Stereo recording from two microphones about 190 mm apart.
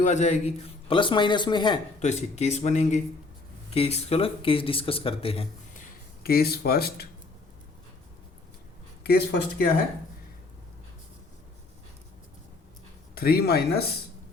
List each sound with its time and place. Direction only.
0.0 s a man's voice: 40° left (ahead or behind)
2.0 s a man's voice: 35° left (ahead or behind)
6.2 s speech: 55° left (ahead or behind)
9.0 s speech: 55° left (ahead or behind)
13.1 s speech: 55° left (ahead or behind)